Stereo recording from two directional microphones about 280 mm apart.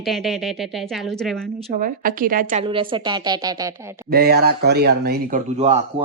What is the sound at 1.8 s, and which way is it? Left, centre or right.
Speech, right.